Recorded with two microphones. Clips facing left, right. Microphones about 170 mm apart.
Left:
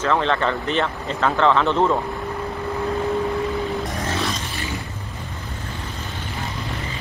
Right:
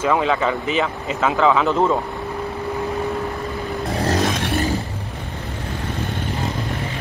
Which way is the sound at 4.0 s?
40° right (ahead or behind).